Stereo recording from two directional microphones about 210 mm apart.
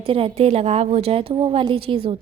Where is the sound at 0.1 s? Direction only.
30° right (ahead or behind).